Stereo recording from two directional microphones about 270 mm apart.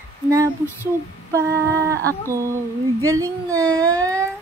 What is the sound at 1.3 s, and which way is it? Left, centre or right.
Humming, centre.